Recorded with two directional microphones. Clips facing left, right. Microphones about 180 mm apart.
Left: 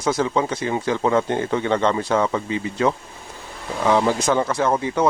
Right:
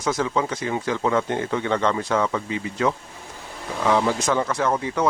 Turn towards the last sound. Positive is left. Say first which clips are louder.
# left 3 dB
turn(degrees=25)  # may be behind; listen again after turning